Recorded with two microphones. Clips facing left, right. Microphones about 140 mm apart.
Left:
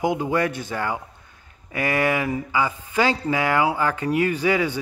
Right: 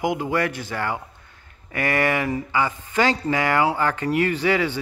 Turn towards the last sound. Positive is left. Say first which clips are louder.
# even
turn(degrees=10)  # may be behind; listen again after turning